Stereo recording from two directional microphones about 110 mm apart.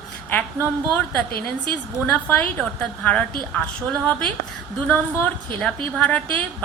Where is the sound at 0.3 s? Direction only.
15° left (ahead or behind).